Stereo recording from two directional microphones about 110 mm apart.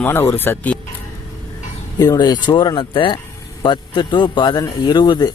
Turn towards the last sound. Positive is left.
turn(degrees=40)  # may be behind; listen again after turning